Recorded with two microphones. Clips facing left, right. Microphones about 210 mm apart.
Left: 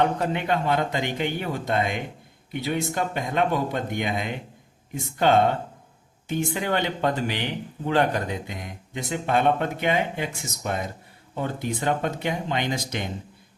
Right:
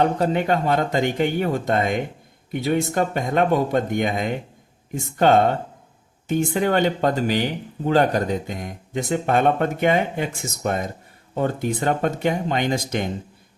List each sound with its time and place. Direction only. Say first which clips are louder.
0.0 s speech: right 4 dB; 40° right (ahead or behind)
6.2 s speech: right 6 dB; 50° right (ahead or behind)